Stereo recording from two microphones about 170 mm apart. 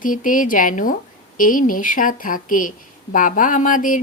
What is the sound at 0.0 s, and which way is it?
Speech, 50° left (ahead or behind).